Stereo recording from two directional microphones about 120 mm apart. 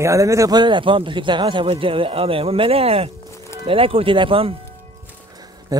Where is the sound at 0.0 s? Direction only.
25° right (ahead or behind); by 4.6 s 50° right (ahead or behind).